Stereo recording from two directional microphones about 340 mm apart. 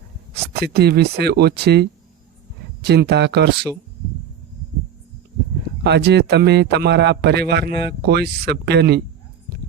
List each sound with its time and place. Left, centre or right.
0.5 s speech: right
5.8 s speech: right